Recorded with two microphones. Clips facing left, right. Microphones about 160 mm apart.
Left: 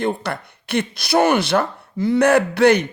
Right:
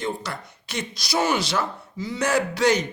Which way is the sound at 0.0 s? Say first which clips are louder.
Left 7 dB; 60° left (ahead or behind).